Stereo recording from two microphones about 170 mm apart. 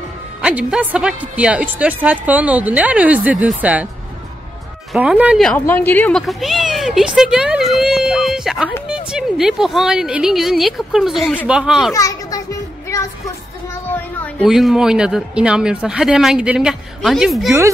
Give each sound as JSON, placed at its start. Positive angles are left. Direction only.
{"t": 0.4, "sound": "a woman's voice", "side_deg": -5}
{"t": 4.9, "sound": "a woman's voice", "side_deg": -5}
{"t": 5.4, "sound": "speech", "side_deg": 10}
{"t": 11.9, "sound": "children playing", "side_deg": 20}
{"t": 14.4, "sound": "speech", "side_deg": 0}